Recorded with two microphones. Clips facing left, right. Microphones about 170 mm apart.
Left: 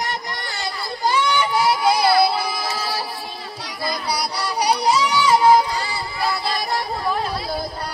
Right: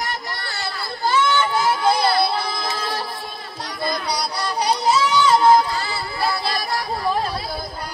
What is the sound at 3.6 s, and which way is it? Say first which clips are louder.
Music: right 1 dB; 10° left (ahead or behind).